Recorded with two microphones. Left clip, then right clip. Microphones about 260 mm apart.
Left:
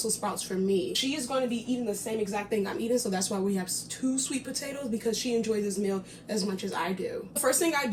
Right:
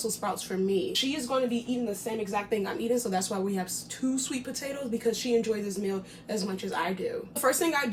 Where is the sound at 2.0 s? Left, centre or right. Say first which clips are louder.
Right 1 dB; centre.